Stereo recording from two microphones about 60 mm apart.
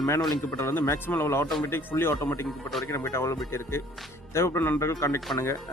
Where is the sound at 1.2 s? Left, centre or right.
Left.